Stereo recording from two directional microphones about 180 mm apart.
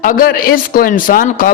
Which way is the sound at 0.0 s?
50° left (ahead or behind).